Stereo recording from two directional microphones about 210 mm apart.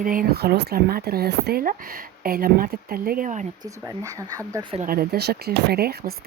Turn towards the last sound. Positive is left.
turn(degrees=-45)  # may be behind; listen again after turning